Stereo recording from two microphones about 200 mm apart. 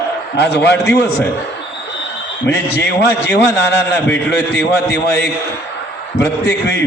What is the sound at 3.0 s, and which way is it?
Speech, 55° left (ahead or behind).